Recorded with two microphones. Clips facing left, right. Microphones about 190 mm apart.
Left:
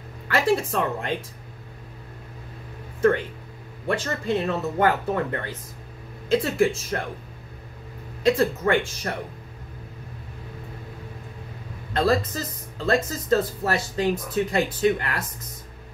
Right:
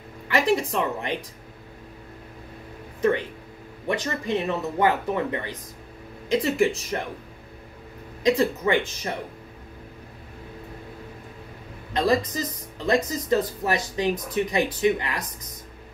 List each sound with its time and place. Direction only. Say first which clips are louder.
0.3 s speech: even; 15° right (ahead or behind)
3.8 s speech: left 1 dB; 15° right (ahead or behind)
8.2 s speech: left 1 dB; 15° right (ahead or behind)
11.9 s speech: even; 15° right (ahead or behind)